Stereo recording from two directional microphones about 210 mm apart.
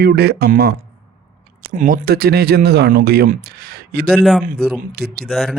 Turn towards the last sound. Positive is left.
turn(degrees=0)  # may be behind; listen again after turning